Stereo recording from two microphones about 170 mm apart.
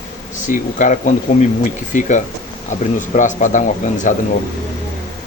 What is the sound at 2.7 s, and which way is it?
Speech, 45° left (ahead or behind).